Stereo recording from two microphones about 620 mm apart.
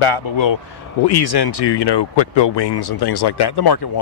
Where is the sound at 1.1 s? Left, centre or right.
Left.